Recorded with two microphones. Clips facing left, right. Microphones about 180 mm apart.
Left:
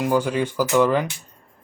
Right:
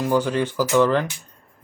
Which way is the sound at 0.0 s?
10° left (ahead or behind).